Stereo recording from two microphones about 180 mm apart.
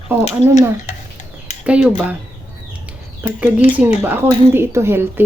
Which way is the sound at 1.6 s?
5° right (ahead or behind).